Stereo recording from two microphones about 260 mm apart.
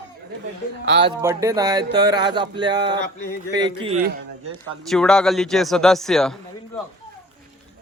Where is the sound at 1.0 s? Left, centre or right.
Centre.